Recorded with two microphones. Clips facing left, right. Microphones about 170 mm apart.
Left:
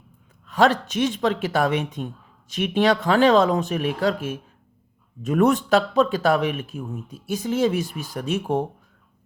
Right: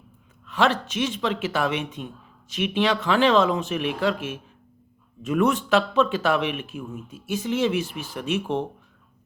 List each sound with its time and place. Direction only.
0.4 s speech: 40° left (ahead or behind)